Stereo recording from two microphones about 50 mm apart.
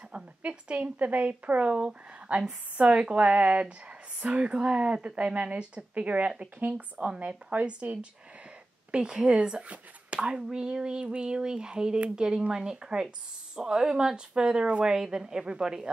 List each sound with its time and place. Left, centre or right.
0.1 s a woman's voice: right